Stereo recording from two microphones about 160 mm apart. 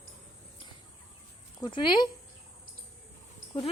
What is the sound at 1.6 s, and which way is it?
Speech, 30° left (ahead or behind).